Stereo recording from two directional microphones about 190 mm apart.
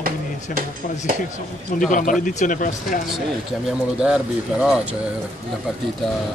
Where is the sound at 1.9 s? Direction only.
45° left (ahead or behind).